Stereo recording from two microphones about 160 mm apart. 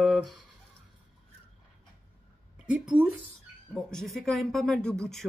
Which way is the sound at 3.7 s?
Centre (ahead or behind).